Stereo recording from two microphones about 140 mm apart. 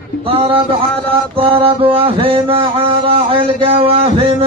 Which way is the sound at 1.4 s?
40° right (ahead or behind).